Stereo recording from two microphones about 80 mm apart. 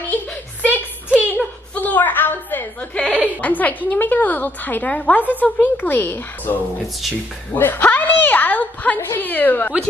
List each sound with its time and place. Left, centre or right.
0.1 s a sound: centre
3.3 s a woman's voice: left
7.5 s a woman's voice: left